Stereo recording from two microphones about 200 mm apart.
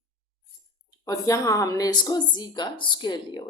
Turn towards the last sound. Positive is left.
turn(degrees=25)  # may be behind; listen again after turning